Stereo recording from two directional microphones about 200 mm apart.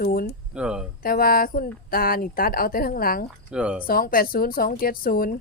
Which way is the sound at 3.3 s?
5° right (ahead or behind).